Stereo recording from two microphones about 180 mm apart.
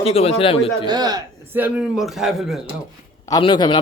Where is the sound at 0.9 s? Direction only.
20° right (ahead or behind).